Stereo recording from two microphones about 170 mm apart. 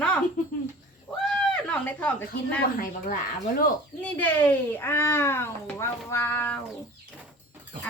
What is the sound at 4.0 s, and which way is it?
A child's voice, 10° left (ahead or behind).